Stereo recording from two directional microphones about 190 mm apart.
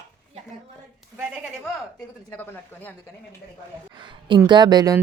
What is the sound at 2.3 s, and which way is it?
Speech, 10° left (ahead or behind).